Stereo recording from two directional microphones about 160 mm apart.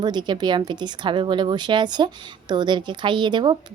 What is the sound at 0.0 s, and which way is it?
A woman's voice, 25° right (ahead or behind).